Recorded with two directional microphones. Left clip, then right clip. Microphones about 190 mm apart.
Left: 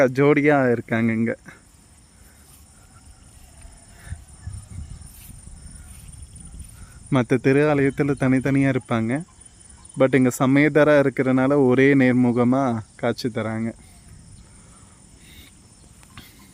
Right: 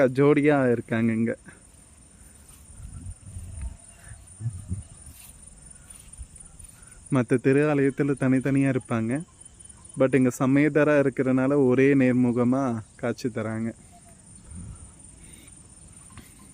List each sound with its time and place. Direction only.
0.0 s speech: 15° left (ahead or behind)
7.1 s speech: 20° left (ahead or behind)